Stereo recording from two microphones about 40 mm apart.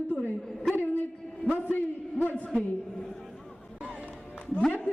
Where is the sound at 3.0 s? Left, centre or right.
Centre.